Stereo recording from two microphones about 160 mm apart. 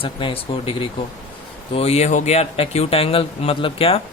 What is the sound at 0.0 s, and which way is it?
Speech, 35° left (ahead or behind).